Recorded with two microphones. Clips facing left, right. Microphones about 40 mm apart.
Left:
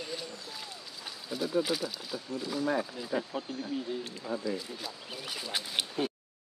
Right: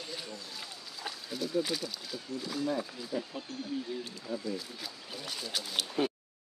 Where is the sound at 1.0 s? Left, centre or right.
Centre.